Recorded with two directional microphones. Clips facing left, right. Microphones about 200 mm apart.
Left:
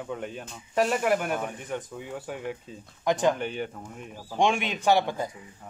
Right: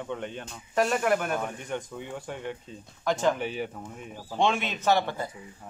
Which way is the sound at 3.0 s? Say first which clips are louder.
Left 2 dB; 15° left (ahead or behind).